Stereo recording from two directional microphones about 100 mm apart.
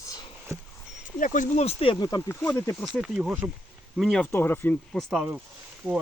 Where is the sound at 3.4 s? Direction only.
30° right (ahead or behind).